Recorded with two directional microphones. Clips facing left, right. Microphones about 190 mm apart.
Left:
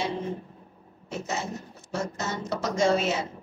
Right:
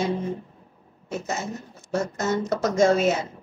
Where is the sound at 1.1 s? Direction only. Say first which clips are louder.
Right 2 dB; 45° right (ahead or behind).